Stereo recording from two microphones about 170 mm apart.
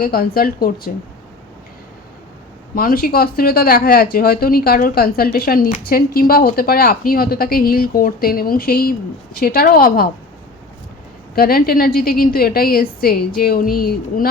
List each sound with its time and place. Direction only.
0.0 s speech: 60° left (ahead or behind)
2.7 s speech: 60° left (ahead or behind)
11.3 s speech: 60° left (ahead or behind)